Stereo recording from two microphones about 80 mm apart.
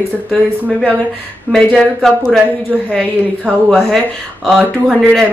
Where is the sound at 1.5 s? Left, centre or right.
Centre.